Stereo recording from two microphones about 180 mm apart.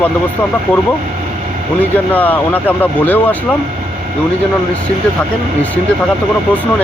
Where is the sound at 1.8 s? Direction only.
10° left (ahead or behind).